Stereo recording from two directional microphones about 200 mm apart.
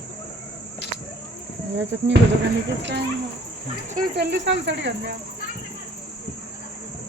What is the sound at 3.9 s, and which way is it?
Speech, 55° right (ahead or behind).